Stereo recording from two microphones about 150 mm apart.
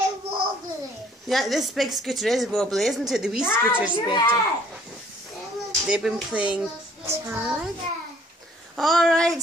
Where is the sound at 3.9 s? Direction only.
30° left (ahead or behind).